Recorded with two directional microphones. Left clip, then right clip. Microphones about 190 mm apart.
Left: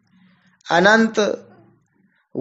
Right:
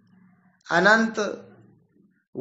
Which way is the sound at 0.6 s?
40° left (ahead or behind).